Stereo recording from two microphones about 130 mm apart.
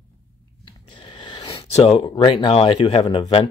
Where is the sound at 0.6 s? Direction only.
40° left (ahead or behind).